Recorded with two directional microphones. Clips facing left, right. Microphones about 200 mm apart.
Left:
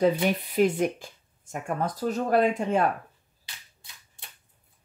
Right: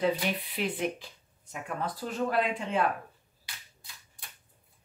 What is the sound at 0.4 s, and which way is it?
Speech, 45° left (ahead or behind).